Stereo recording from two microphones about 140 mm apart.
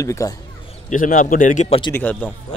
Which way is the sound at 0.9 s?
70° left (ahead or behind).